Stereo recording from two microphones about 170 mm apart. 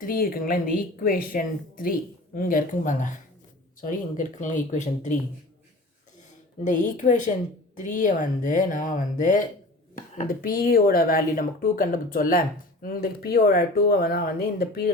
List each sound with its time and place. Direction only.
0.0 s speech: 55° left (ahead or behind)
4.4 s speech: 50° left (ahead or behind)
6.7 s speech: 45° left (ahead or behind)